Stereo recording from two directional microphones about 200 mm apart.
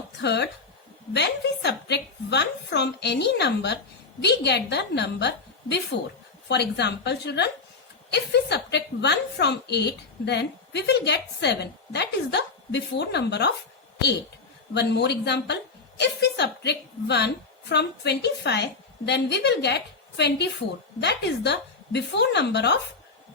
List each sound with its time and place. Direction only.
0.2 s a woman's voice: 60° left (ahead or behind)
14.7 s a woman's voice: 55° left (ahead or behind)